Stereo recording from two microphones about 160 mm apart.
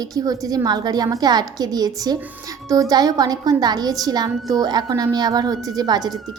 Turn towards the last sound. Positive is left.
turn(degrees=-25)  # may be behind; listen again after turning